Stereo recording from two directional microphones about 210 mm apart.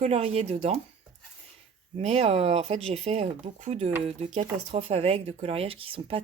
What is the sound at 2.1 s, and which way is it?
A woman's voice, 30° right (ahead or behind).